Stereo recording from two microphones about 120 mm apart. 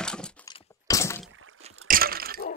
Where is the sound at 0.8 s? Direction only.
25° left (ahead or behind).